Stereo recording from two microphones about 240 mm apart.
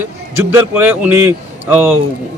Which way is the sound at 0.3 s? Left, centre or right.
Centre.